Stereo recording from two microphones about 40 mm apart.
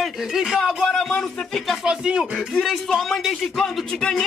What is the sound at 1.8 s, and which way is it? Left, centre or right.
Speech, right.